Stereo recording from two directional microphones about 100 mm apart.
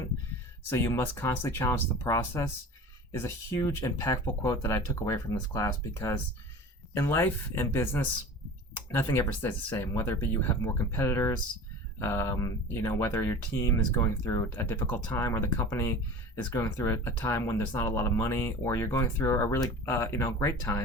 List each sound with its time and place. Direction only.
0.7 s speech: 25° left (ahead or behind)
14.5 s speech: 20° left (ahead or behind)
15.2 s speech: 30° left (ahead or behind)